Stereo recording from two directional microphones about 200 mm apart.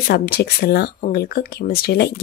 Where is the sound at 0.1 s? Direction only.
50° left (ahead or behind).